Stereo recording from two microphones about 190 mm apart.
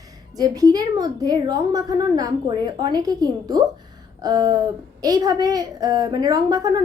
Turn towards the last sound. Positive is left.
turn(degrees=-20)  # may be behind; listen again after turning